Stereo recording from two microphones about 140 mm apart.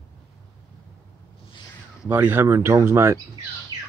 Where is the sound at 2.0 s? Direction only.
15° right (ahead or behind).